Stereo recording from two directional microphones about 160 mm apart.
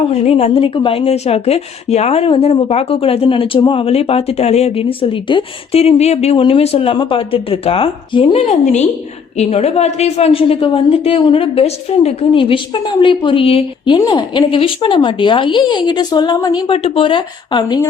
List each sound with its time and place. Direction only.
0.1 s speech: 40° left (ahead or behind)